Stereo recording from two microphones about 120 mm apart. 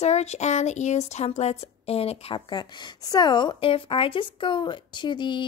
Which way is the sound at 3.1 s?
35° left (ahead or behind).